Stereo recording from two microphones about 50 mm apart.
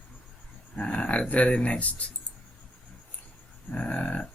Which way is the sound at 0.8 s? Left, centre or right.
Left.